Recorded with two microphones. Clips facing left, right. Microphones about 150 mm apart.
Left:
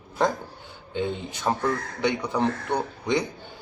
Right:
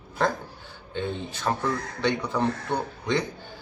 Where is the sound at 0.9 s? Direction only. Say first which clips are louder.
Left 2 dB; 15° left (ahead or behind).